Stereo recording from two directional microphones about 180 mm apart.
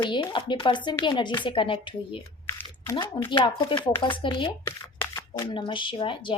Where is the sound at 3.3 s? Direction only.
25° left (ahead or behind).